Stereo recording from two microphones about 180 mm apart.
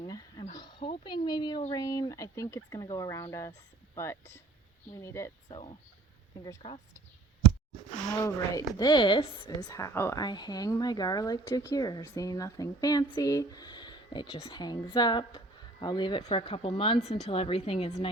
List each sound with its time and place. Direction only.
0.0 s a sound: 25° left (ahead or behind)
1.7 s speech: 20° left (ahead or behind)
5.5 s speech: 30° left (ahead or behind)
8.2 s a woman's voice: 20° left (ahead or behind)